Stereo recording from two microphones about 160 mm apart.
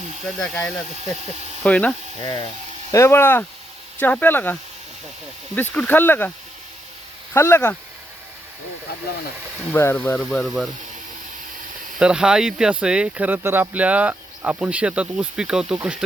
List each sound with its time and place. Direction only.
0.3 s speech: 5° left (ahead or behind)
2.2 s speech: 30° left (ahead or behind)
2.9 s speech: 15° left (ahead or behind)
5.7 s speech: 10° left (ahead or behind)
7.3 s speech: 15° left (ahead or behind)
9.7 s speech: 15° left (ahead or behind)
11.9 s speech: 5° right (ahead or behind)